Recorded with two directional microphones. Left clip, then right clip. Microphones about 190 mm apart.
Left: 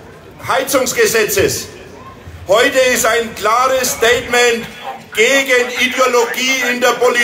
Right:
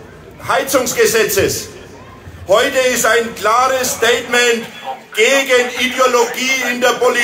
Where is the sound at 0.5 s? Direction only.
25° left (ahead or behind).